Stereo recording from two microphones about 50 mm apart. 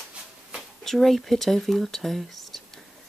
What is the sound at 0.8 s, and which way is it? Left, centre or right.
Speech, centre.